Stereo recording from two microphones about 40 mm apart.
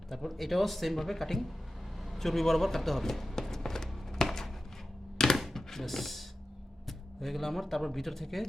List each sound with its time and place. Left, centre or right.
0.1 s a man's voice: centre
3.4 s music: centre
5.1 s a sound: centre
5.5 s speech: centre